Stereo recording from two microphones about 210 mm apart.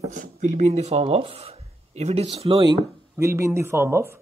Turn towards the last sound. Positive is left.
turn(degrees=-10)  # may be behind; listen again after turning